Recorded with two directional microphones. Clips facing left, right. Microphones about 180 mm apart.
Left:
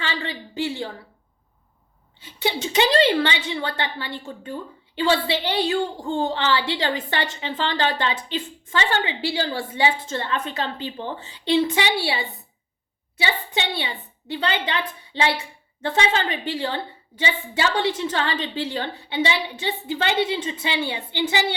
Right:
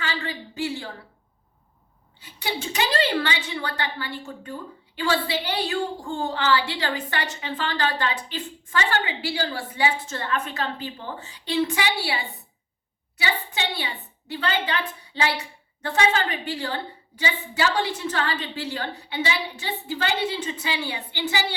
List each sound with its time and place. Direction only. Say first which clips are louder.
0.0 s a sound: left 1 dB; 25° left (ahead or behind)
2.2 s a woman's voice: left 5 dB; 25° left (ahead or behind)
13.1 s a woman's voice: left 2 dB; 25° left (ahead or behind)